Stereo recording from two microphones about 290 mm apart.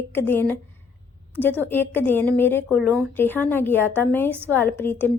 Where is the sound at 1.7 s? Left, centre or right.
Centre.